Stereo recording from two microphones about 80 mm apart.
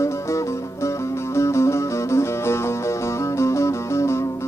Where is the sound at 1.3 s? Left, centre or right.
Left.